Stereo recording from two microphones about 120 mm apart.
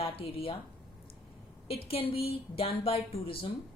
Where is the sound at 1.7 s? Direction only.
55° left (ahead or behind).